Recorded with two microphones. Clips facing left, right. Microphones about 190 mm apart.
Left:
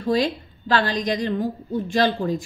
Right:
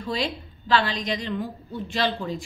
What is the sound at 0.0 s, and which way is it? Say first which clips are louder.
A woman's voice: left 7 dB; 45° left (ahead or behind).